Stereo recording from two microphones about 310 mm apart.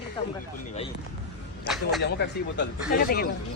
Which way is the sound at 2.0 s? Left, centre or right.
Left.